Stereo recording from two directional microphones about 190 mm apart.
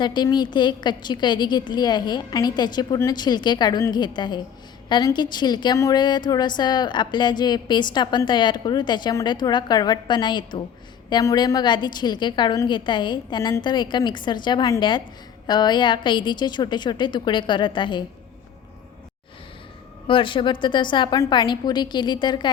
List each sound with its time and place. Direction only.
0.0 s a woman's voice: 25° left (ahead or behind)
20.1 s a woman's voice: 25° left (ahead or behind)